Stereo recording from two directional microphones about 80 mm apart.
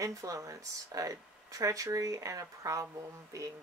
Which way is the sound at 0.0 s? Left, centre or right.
Right.